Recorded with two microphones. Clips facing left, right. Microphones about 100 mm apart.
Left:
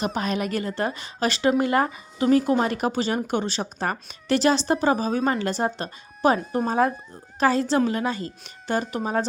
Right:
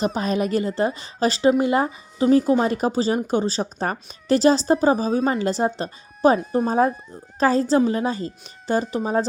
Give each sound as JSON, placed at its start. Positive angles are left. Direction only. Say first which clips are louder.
{"t": 0.0, "sound": "speech", "louder": "right 3 dB", "side_deg": -30}
{"t": 6.4, "sound": "speech", "louder": "right 3 dB", "side_deg": 0}
{"t": 6.7, "sound": "speech", "louder": "right 1 dB", "side_deg": -30}